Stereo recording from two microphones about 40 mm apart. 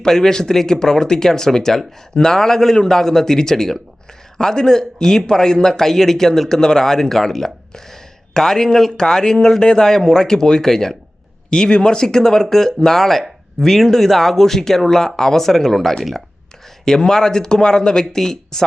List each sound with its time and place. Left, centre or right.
0.0 s a man's voice: centre